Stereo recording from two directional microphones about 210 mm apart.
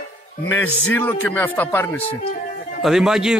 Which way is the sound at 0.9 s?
10° left (ahead or behind).